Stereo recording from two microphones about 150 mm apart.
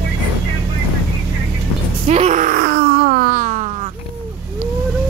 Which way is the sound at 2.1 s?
50° right (ahead or behind).